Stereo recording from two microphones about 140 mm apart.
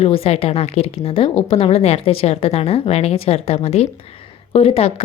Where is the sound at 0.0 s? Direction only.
45° left (ahead or behind).